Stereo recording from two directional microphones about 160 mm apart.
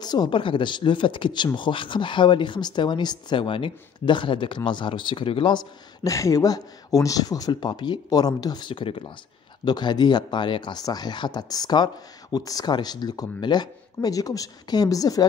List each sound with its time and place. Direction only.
0.0 s speech: 25° left (ahead or behind)